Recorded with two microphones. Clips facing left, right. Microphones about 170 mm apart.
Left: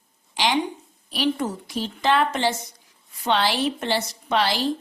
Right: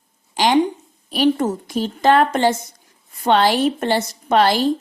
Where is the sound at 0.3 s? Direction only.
50° right (ahead or behind).